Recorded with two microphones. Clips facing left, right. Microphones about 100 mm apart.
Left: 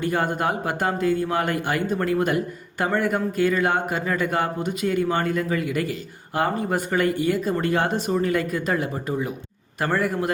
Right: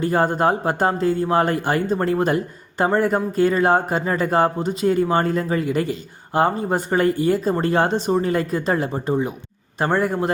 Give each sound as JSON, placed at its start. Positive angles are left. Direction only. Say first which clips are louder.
{"t": 0.0, "sound": "a man's voice", "louder": "right 5 dB", "side_deg": -35}